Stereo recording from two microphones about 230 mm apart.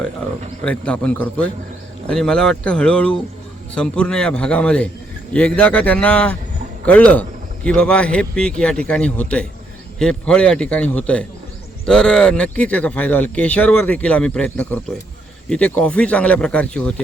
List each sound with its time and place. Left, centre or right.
0.6 s speech: centre